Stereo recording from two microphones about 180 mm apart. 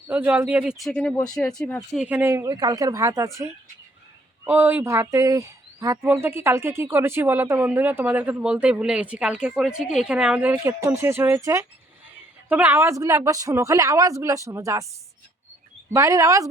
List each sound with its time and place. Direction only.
0.1 s speech: 10° right (ahead or behind)
2.0 s speech: 10° right (ahead or behind)
15.9 s speech: 15° right (ahead or behind)